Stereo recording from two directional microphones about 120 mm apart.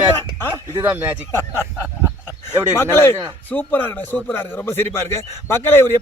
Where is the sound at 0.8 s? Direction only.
15° right (ahead or behind).